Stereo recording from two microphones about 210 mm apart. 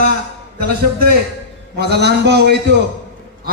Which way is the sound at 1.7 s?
50° right (ahead or behind).